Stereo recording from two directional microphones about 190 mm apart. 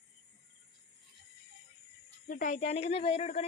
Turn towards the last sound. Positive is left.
turn(degrees=35)  # may be behind; listen again after turning